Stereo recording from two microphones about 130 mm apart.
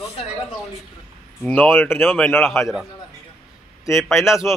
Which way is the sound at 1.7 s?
15° left (ahead or behind).